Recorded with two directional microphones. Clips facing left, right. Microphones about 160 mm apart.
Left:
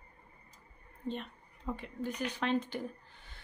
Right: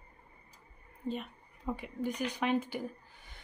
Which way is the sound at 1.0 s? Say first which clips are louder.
Right 2 dB; 5° right (ahead or behind).